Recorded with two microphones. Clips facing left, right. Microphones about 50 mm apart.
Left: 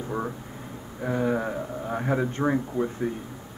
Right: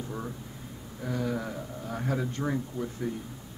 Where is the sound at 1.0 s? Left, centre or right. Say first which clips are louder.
Left 6 dB; left.